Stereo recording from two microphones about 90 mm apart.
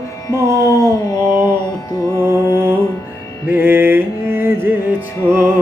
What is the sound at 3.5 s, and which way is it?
Music, 25° right (ahead or behind).